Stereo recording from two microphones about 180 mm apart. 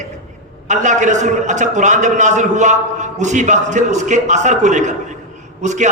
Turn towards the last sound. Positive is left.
turn(degrees=-40)  # may be behind; listen again after turning